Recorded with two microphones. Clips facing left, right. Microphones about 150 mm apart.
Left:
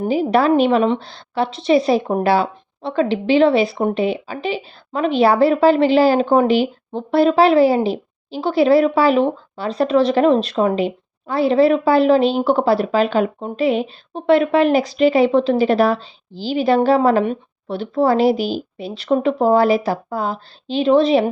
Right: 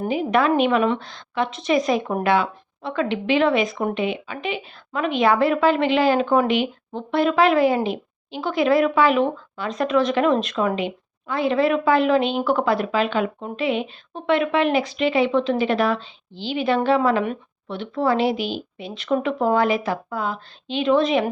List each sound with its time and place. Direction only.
0.1 s a woman's voice: 35° left (ahead or behind)